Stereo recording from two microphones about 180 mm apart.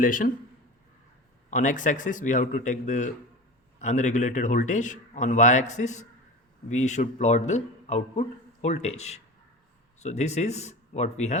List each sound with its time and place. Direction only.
0.0 s a man's voice: 50° left (ahead or behind)
1.5 s a man's voice: 45° left (ahead or behind)